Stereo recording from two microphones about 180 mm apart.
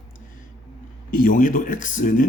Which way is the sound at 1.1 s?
50° left (ahead or behind).